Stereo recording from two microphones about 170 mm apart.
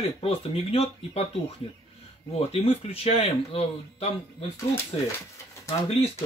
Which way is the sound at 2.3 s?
35° left (ahead or behind).